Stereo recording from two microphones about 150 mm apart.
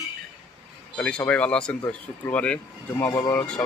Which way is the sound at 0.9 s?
10° left (ahead or behind).